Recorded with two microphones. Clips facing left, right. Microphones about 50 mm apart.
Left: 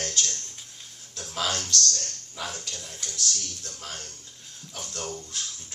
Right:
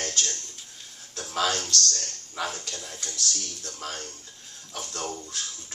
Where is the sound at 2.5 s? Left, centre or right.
Right.